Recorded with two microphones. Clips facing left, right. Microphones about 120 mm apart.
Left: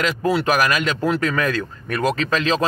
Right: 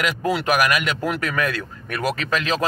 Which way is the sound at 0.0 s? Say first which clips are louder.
Left 3 dB; 15° right (ahead or behind).